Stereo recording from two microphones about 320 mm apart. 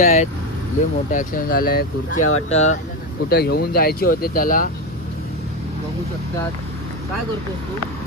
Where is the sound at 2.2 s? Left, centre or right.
Left.